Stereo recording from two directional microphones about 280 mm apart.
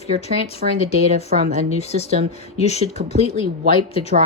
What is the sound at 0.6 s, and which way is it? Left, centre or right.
Speech, right.